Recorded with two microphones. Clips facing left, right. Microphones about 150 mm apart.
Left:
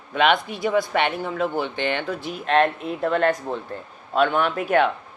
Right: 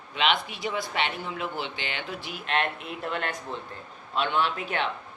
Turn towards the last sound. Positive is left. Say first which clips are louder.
# left 8 dB
turn(degrees=50)  # may be behind; listen again after turning